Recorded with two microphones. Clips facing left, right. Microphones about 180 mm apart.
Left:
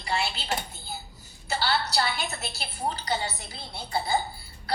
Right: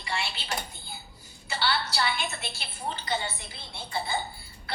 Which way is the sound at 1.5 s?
40° left (ahead or behind).